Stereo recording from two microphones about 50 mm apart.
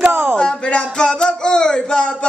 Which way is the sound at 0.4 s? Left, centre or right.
Left.